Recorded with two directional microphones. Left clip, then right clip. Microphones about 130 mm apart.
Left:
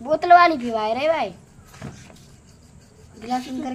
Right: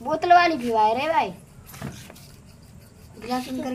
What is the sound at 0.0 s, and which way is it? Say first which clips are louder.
A woman's voice: left 4 dB; 25° left (ahead or behind).